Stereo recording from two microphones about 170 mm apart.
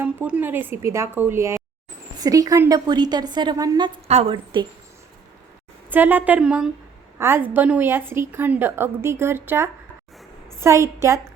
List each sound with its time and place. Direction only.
0.0 s a woman's voice: 10° right (ahead or behind)
4.1 s a woman's voice: 35° right (ahead or behind)
5.9 s a woman's voice: 10° right (ahead or behind)